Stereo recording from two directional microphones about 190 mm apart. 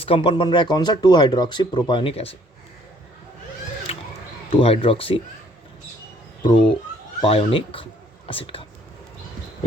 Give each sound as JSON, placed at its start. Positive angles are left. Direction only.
{"t": 0.0, "sound": "speech", "side_deg": 25}
{"t": 3.9, "sound": "a sound", "side_deg": 35}
{"t": 4.6, "sound": "speech", "side_deg": 30}
{"t": 6.4, "sound": "speech", "side_deg": 25}